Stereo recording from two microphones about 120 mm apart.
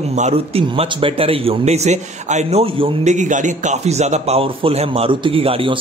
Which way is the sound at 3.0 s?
90° right.